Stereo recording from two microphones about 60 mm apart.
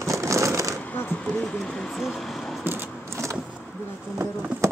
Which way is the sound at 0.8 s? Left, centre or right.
Left.